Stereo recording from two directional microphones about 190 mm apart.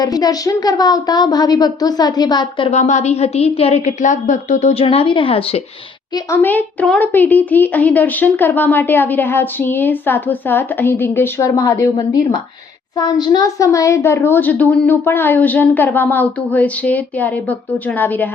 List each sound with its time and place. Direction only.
0.0 s a woman's voice: 20° left (ahead or behind)
6.1 s a child's voice: 10° left (ahead or behind)